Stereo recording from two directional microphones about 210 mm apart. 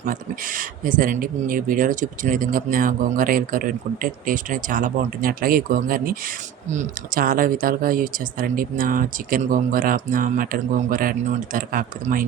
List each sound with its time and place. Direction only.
0.0 s speech: 40° right (ahead or behind)